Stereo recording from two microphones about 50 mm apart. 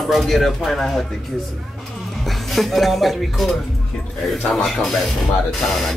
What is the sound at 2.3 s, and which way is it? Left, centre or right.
Speech, centre.